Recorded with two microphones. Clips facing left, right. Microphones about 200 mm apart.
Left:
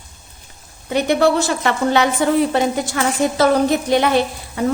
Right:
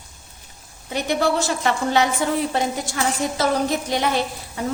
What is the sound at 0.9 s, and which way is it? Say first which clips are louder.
A woman's voice: left 6 dB; 65° left (ahead or behind).